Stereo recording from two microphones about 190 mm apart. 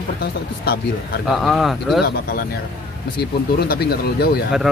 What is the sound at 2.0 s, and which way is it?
Speech, 55° left (ahead or behind).